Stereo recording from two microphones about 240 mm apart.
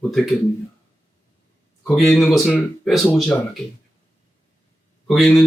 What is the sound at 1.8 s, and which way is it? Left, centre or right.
Speech, centre.